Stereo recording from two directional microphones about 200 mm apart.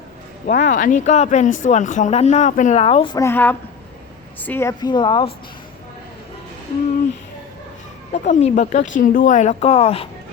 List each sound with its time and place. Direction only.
0.4 s a woman's voice: 40° left (ahead or behind); by 5.3 s 25° left (ahead or behind)
8.1 s speech: 35° left (ahead or behind)